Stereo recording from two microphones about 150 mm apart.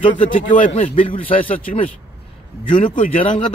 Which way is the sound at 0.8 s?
40° left (ahead or behind).